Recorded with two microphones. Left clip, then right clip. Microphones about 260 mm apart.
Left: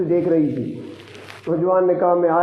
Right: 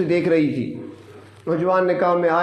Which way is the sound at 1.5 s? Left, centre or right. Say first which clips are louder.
Left 1 dB; right.